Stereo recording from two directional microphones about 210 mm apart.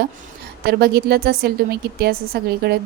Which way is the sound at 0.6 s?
50° right (ahead or behind).